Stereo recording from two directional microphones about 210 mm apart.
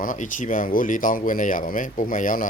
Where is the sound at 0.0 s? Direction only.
40° left (ahead or behind).